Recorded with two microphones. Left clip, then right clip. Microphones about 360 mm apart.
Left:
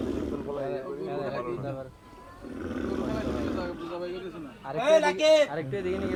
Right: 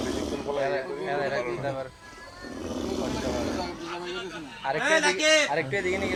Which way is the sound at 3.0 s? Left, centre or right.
Right.